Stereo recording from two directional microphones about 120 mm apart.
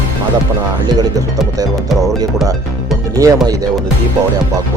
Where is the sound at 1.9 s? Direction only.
Centre (ahead or behind).